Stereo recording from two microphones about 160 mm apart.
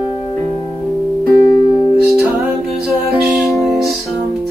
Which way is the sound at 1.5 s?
25° left (ahead or behind).